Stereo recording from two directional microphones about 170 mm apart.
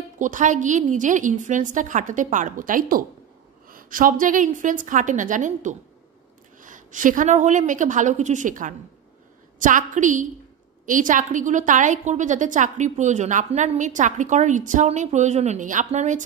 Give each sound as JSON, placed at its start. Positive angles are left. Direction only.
{"t": 0.2, "sound": "a woman's voice", "side_deg": -50}